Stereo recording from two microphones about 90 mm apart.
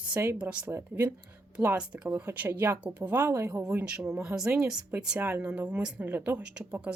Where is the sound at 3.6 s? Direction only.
10° right (ahead or behind).